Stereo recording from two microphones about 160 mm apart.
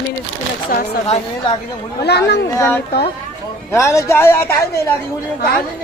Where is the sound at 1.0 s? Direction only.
40° left (ahead or behind).